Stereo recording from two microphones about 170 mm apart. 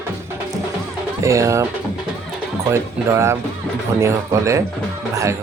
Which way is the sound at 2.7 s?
15° right (ahead or behind).